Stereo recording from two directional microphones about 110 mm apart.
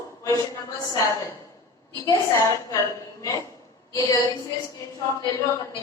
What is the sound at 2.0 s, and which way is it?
A woman's voice, 30° left (ahead or behind).